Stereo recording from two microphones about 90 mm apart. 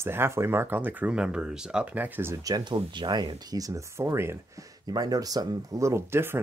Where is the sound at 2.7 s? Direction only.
60° right (ahead or behind).